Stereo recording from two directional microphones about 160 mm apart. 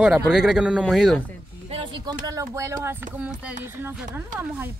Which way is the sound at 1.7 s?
30° right (ahead or behind).